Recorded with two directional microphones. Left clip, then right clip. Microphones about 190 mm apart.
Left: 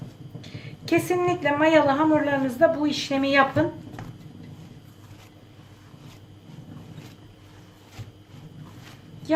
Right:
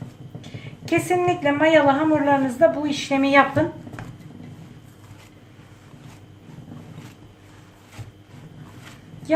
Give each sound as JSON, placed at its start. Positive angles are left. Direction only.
{"t": 0.4, "sound": "speech", "side_deg": 15}